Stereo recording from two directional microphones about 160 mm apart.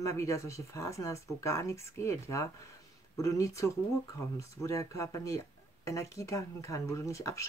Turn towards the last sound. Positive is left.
turn(degrees=20)  # may be behind; listen again after turning